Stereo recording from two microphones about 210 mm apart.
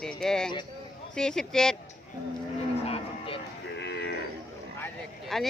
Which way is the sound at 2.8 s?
30° left (ahead or behind).